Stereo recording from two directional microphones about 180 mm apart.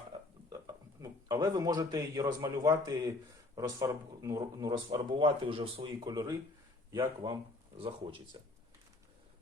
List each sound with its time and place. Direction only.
0.5 s speech: 20° right (ahead or behind)